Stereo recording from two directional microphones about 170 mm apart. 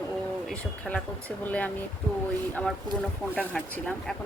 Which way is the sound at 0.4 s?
5° left (ahead or behind).